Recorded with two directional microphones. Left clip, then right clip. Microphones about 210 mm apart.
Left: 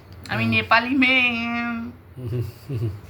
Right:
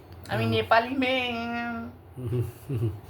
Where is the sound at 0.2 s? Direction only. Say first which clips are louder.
Left 5 dB; 15° right (ahead or behind).